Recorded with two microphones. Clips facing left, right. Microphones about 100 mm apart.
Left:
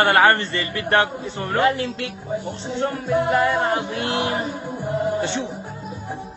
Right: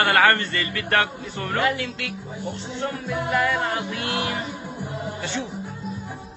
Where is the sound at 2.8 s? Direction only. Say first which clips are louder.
Left 7 dB; 35° left (ahead or behind).